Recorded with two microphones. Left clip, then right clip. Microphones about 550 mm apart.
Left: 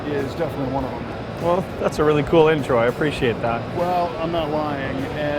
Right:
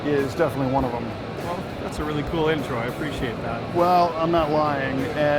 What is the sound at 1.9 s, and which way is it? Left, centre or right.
Speech, left.